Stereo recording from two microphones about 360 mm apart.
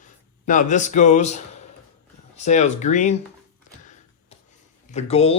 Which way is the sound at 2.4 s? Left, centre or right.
Centre.